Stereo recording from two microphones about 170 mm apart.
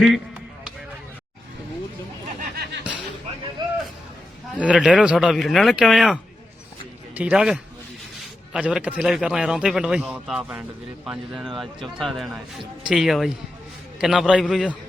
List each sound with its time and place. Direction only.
3.6 s a sound: 25° right (ahead or behind)
4.5 s a man's voice: 5° right (ahead or behind)
14.4 s a man's voice: 5° left (ahead or behind)